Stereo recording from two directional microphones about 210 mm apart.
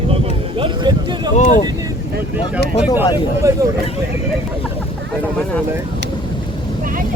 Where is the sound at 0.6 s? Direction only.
20° right (ahead or behind).